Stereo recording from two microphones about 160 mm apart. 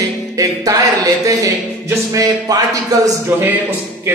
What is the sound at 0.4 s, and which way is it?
Speech, 20° right (ahead or behind).